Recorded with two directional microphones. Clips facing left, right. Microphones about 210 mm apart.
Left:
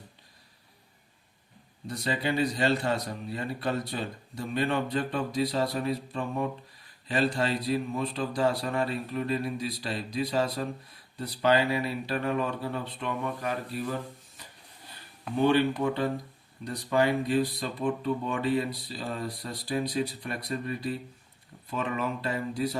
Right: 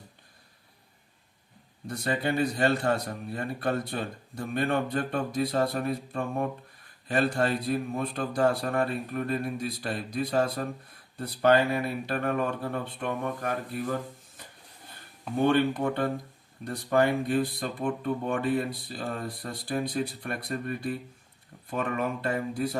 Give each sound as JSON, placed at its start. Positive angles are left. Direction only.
{"t": 1.9, "sound": "a man's voice", "side_deg": -50}
{"t": 15.4, "sound": "a man's voice", "side_deg": -50}